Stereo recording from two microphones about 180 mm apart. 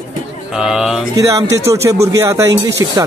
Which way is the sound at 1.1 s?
15° right (ahead or behind).